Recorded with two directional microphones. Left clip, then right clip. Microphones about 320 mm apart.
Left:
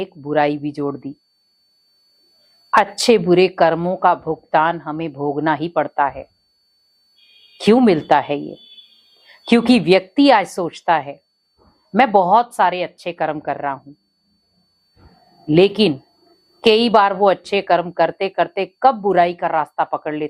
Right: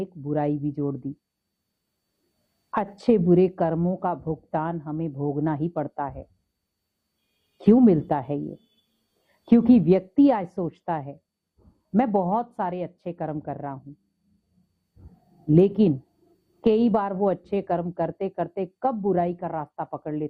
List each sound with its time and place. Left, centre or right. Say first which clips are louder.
0.2 s a woman's voice: left 9 dB; centre
2.6 s a woman's voice: left 10 dB; centre
4.5 s a woman's voice: left 13 dB; centre
7.3 s a woman's voice: left 6 dB; centre
8.4 s speech: left 5 dB; left
9.2 s a woman's voice: left 5 dB; centre
11.6 s a sound: left 10 dB; centre
12.3 s a woman's voice: left 13 dB; centre
14.9 s a sound: left 8 dB; centre
15.5 s a woman's voice: left 6 dB; centre